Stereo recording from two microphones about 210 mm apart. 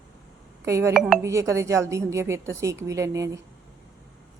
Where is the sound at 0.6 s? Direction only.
15° right (ahead or behind).